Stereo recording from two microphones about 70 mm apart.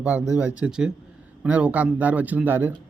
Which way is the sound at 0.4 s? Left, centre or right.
Centre.